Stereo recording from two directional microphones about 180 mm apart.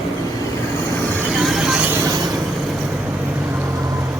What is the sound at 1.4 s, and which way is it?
Vehicle, centre (ahead or behind).